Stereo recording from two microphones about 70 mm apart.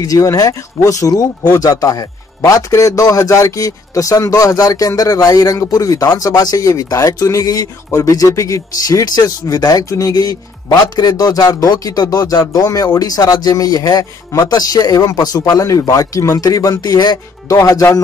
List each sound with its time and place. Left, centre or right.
0.0 s speech: left
9.0 s a man's voice: left
15.6 s speech: left
16.8 s a man's voice: left
17.5 s speech: left